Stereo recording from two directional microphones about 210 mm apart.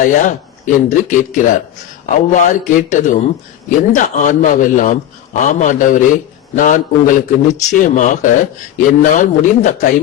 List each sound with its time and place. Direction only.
0.0 s a man's voice: 35° left (ahead or behind)